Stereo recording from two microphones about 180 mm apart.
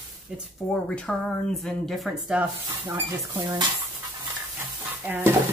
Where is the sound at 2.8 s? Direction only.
15° right (ahead or behind).